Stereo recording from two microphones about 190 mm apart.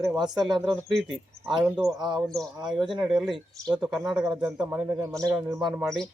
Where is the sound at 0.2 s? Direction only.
20° right (ahead or behind).